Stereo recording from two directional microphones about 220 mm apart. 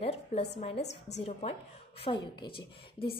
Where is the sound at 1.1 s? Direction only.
30° left (ahead or behind).